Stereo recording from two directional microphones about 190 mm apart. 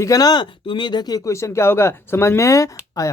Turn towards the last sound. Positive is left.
turn(degrees=15)  # may be behind; listen again after turning